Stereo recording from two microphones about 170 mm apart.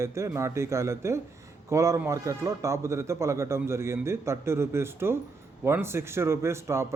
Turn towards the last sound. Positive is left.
turn(degrees=-15)  # may be behind; listen again after turning